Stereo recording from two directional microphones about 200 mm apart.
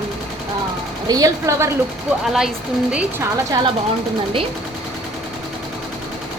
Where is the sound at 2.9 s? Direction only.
15° right (ahead or behind).